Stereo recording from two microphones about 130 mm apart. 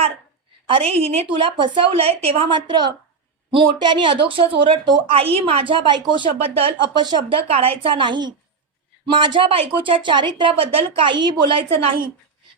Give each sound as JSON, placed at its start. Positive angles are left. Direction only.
{"t": 0.7, "sound": "a woman's voice", "side_deg": -50}
{"t": 1.5, "sound": "a woman's voice", "side_deg": -40}
{"t": 7.4, "sound": "a woman's voice", "side_deg": -50}